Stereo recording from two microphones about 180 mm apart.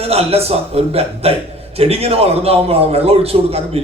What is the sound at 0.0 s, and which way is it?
A man's voice, 35° right (ahead or behind).